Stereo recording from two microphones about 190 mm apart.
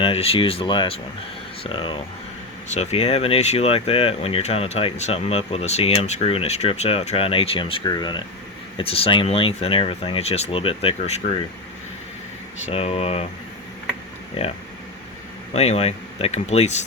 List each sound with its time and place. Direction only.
0.0 s speech: 30° left (ahead or behind)
12.6 s speech: 30° left (ahead or behind)
14.4 s speech: 35° left (ahead or behind)
15.5 s speech: 35° left (ahead or behind)